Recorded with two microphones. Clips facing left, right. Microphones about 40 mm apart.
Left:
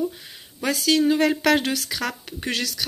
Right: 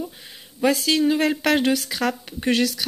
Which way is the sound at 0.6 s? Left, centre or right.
Centre.